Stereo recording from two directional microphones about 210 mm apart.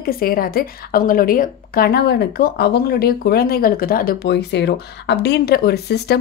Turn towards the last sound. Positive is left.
turn(degrees=50)  # may be behind; listen again after turning